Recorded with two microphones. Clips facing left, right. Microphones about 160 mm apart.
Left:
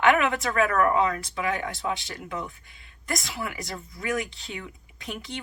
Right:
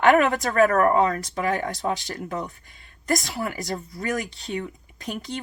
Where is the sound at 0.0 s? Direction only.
40° right (ahead or behind).